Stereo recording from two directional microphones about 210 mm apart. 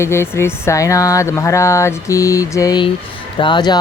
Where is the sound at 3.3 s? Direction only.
20° left (ahead or behind).